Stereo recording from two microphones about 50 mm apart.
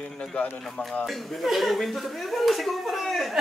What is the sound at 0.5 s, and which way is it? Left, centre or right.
Speech, centre.